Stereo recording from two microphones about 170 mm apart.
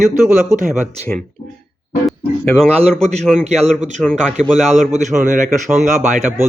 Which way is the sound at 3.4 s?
40° right (ahead or behind).